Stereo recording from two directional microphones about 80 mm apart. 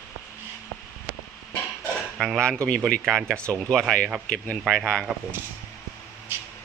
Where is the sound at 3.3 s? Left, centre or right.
Right.